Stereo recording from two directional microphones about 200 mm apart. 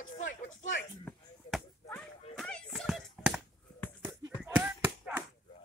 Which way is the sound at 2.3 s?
5° left (ahead or behind).